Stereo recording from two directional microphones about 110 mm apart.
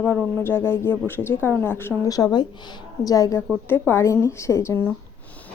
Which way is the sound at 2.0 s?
35° left (ahead or behind).